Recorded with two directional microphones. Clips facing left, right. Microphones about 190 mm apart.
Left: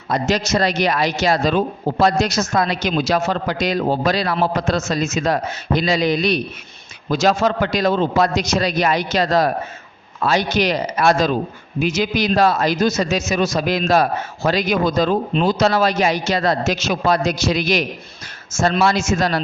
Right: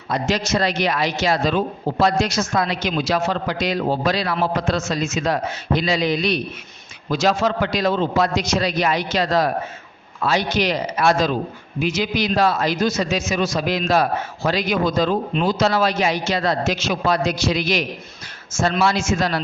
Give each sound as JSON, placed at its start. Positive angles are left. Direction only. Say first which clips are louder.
{"t": 0.1, "sound": "a man's voice", "louder": "left 2 dB", "side_deg": 40}